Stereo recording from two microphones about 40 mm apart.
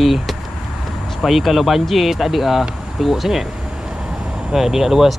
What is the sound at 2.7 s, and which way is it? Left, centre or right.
Vehicle, centre.